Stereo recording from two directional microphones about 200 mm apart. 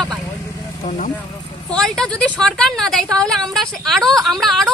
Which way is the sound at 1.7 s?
5° left (ahead or behind).